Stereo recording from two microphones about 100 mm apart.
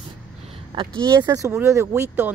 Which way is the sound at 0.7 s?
55° right (ahead or behind).